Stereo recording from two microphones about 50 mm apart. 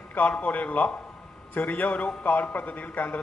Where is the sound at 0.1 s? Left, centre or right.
Left.